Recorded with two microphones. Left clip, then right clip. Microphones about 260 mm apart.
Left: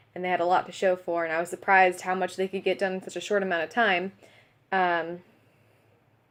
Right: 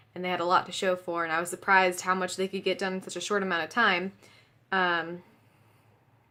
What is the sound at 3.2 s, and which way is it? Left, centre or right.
Speech, right.